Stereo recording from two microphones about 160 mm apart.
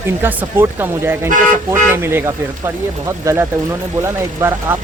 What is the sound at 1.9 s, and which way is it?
Speech, 15° right (ahead or behind).